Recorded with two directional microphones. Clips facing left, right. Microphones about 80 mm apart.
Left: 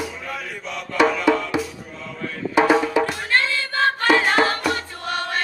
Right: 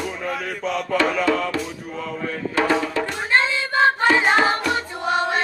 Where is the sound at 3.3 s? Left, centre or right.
Centre.